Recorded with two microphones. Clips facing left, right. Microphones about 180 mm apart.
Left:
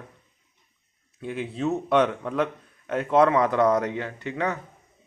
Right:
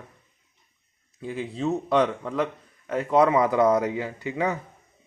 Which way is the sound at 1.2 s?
Centre (ahead or behind).